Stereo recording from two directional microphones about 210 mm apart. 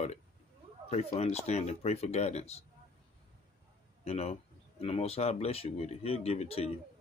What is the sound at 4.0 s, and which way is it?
Speech, 30° left (ahead or behind).